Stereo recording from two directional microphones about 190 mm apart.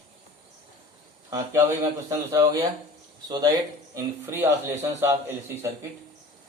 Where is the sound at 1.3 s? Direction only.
15° right (ahead or behind).